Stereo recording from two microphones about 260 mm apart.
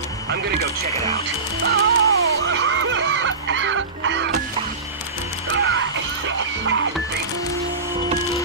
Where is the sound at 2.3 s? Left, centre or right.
Right.